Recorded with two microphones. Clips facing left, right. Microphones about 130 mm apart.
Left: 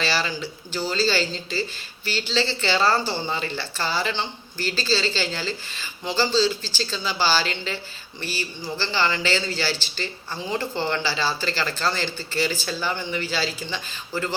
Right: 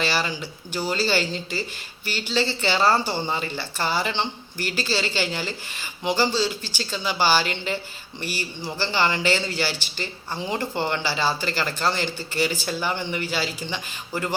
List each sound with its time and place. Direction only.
0.0 s speech: 15° right (ahead or behind)